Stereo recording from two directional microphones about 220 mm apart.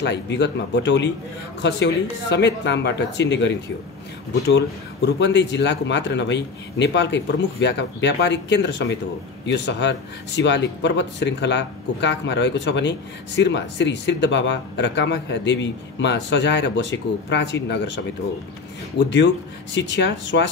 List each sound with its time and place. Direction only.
0.0 s speech: 50° left (ahead or behind)